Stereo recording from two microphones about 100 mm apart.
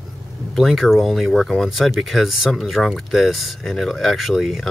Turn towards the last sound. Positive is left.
turn(degrees=0)  # may be behind; listen again after turning